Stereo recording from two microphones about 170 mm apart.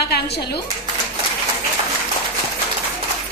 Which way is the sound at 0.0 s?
75° left (ahead or behind).